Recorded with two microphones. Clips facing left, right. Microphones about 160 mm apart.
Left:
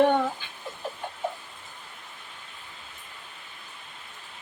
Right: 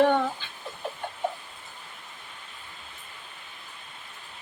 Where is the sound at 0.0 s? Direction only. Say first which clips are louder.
Even; 15° left (ahead or behind).